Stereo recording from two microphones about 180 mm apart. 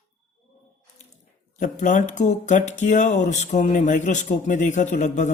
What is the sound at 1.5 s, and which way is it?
Speech, 45° left (ahead or behind).